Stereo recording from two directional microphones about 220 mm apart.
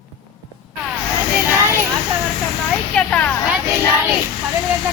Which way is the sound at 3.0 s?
5° left (ahead or behind).